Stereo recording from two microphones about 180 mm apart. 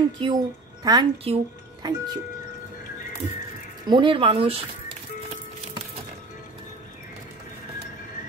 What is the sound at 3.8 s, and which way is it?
A woman's voice, 25° right (ahead or behind).